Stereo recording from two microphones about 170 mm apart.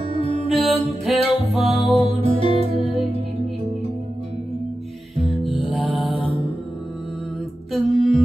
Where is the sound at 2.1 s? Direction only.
30° left (ahead or behind).